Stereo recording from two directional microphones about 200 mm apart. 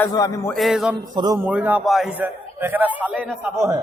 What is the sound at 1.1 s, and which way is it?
Speech, 20° right (ahead or behind).